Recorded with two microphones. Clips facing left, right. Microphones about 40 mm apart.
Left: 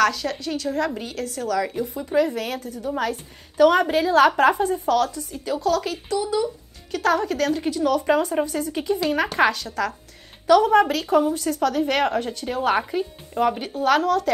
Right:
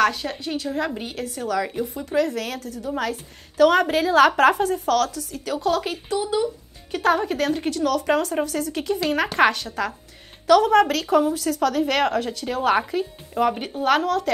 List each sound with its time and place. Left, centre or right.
0.0 s a woman's voice: centre
2.0 s a woman's voice: centre
5.8 s a woman's voice: right
7.8 s a woman's voice: centre
9.4 s a woman's voice: right
9.7 s a woman's voice: centre
10.4 s a woman's voice: centre
13.7 s a woman's voice: centre